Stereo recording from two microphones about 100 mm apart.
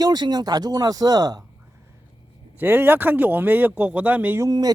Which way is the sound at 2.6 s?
20° right (ahead or behind).